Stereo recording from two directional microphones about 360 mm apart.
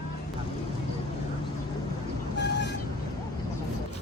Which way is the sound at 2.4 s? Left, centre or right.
Left.